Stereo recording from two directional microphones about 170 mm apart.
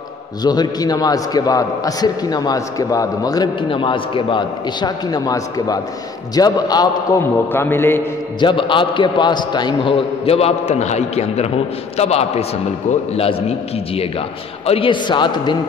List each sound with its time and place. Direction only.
0.4 s a man's voice: 25° left (ahead or behind)
7.5 s a man's voice: 15° left (ahead or behind)
8.4 s a man's voice: 30° left (ahead or behind)